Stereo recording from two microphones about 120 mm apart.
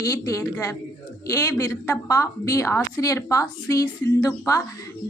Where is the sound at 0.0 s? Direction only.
30° left (ahead or behind).